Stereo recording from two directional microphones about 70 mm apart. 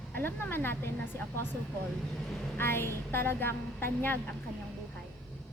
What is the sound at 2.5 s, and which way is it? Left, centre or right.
A woman's voice, left.